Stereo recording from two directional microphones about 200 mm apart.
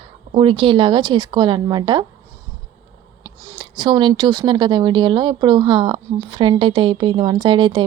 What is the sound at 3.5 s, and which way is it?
A woman's voice, 20° right (ahead or behind).